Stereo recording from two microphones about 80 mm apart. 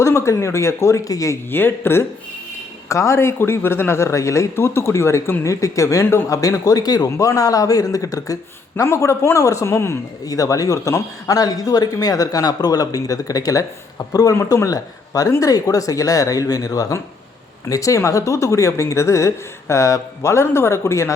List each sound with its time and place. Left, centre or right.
0.0 s speech: left
1.5 s a man's voice: left
8.7 s speech: left
10.2 s a man's voice: left